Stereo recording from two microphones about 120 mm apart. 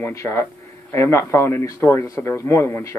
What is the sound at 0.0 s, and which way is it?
Speech, 20° left (ahead or behind).